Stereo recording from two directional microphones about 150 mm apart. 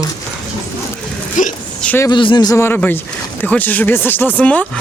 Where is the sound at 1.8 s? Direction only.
10° left (ahead or behind).